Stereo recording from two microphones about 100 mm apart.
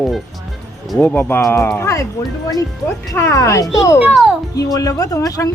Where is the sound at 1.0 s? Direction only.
15° left (ahead or behind).